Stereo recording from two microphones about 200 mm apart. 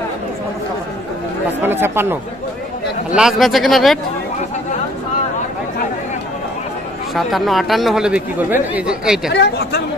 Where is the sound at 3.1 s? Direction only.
Centre (ahead or behind).